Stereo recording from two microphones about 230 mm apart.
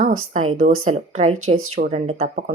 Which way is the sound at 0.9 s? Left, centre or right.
Right.